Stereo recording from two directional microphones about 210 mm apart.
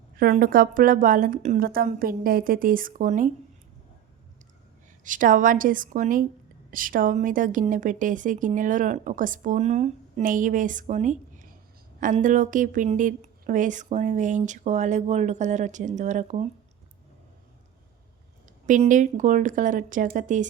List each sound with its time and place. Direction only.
0.2 s a woman's voice: 40° right (ahead or behind)
5.0 s a woman's voice: 40° right (ahead or behind)
18.6 s a woman's voice: 40° right (ahead or behind)